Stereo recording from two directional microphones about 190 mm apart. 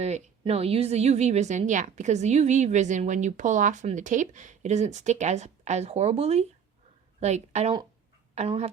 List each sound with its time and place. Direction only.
0.0 s a woman's voice: 35° right (ahead or behind)